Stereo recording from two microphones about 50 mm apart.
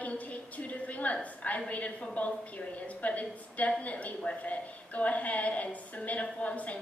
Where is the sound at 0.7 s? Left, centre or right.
Left.